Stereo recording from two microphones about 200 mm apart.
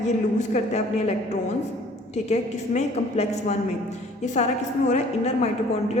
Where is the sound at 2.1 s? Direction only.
35° left (ahead or behind).